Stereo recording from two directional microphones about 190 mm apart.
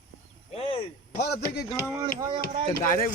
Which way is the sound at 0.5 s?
30° left (ahead or behind).